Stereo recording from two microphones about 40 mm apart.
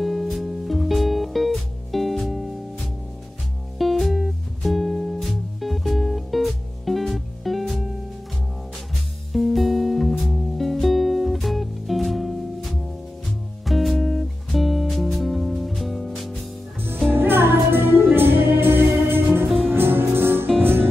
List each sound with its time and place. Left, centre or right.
0.0 s music: centre
9.3 s music: centre
17.1 s music: right